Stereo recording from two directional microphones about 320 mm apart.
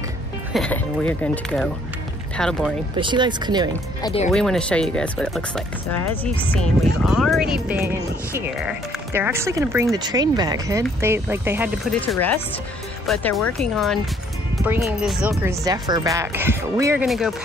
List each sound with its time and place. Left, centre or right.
0.5 s speech: centre
3.0 s speech: centre
4.0 s speech: centre
4.3 s speech: centre
6.5 s speech: centre